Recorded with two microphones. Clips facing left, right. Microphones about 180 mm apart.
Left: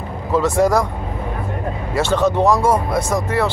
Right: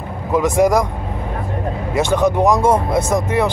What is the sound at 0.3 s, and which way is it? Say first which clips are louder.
Speech: right 1 dB; 15° right (ahead or behind).